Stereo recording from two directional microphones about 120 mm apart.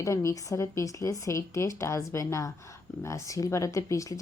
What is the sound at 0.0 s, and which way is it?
Speech, 25° left (ahead or behind).